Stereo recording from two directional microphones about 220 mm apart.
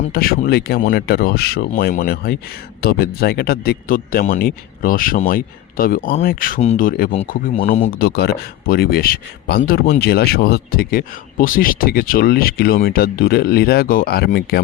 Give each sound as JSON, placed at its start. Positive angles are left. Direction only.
{"t": 0.0, "sound": "speech", "side_deg": 40}